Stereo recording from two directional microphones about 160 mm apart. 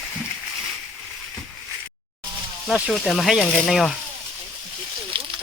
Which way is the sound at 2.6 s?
5° right (ahead or behind).